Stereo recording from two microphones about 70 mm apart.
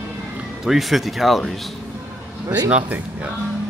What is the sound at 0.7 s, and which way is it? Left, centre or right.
Speech, centre.